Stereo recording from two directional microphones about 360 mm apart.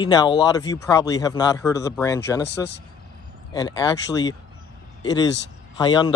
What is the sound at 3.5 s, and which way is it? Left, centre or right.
Speech, centre.